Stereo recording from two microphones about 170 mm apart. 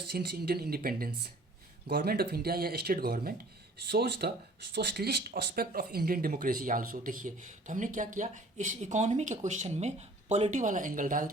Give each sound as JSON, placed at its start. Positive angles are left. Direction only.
{"t": 0.1, "sound": "speech", "side_deg": -65}
{"t": 3.8, "sound": "speech", "side_deg": -75}